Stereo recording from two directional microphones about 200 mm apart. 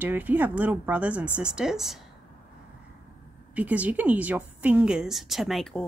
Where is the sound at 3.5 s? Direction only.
5° right (ahead or behind).